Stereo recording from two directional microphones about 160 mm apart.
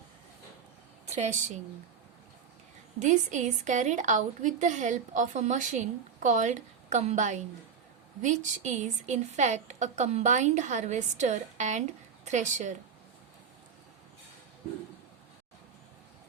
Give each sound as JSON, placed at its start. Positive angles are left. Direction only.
{"t": 1.0, "sound": "a woman's voice", "side_deg": -45}
{"t": 3.0, "sound": "a woman's voice", "side_deg": -50}